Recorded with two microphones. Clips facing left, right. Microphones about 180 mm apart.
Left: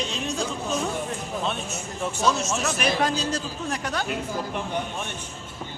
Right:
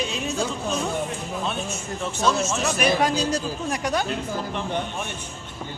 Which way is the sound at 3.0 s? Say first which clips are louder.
Right 3 dB; 10° right (ahead or behind).